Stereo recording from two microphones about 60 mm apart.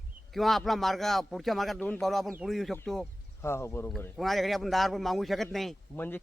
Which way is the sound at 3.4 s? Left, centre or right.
Left.